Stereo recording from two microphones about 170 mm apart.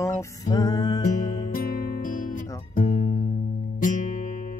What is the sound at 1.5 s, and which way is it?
Music, 55° left (ahead or behind).